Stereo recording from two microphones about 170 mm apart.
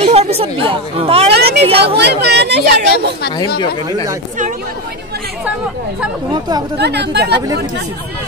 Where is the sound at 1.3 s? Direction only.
75° right (ahead or behind).